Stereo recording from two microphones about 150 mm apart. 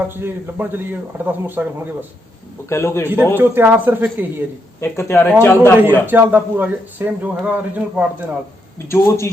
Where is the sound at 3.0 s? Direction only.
10° right (ahead or behind).